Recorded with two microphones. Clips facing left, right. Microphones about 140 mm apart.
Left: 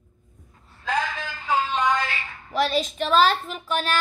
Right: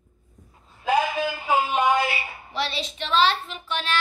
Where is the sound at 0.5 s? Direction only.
15° right (ahead or behind).